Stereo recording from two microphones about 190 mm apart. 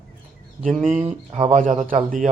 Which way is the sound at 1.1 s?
35° right (ahead or behind).